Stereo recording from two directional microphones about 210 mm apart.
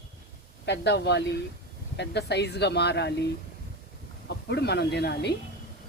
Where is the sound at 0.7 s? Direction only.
55° left (ahead or behind).